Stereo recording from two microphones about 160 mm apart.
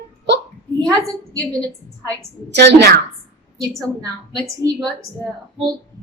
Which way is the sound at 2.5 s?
90° right.